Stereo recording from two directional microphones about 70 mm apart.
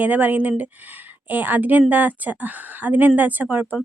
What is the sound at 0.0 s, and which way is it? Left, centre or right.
A woman's voice, right.